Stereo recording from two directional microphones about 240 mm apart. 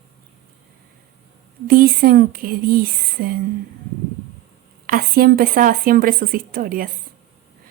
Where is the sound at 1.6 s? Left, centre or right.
Right.